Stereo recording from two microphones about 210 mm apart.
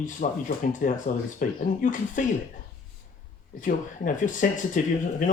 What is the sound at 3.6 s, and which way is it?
Speech, 40° left (ahead or behind).